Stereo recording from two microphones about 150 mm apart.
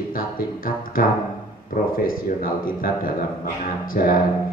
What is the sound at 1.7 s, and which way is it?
A man's voice, 75° left (ahead or behind).